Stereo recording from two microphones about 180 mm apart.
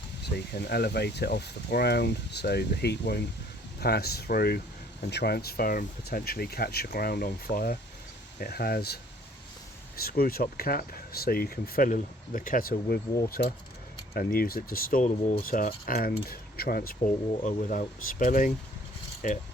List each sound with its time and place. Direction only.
0.6 s speech: 65° left (ahead or behind)
10.0 s speech: 55° left (ahead or behind)